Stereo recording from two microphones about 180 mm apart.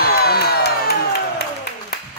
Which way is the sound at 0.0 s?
60° left (ahead or behind).